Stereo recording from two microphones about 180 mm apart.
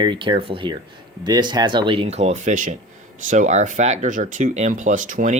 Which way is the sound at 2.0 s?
40° right (ahead or behind).